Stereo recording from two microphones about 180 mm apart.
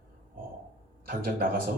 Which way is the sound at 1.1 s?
55° right (ahead or behind).